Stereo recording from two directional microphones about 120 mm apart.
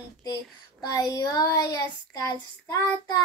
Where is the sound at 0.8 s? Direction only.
30° left (ahead or behind).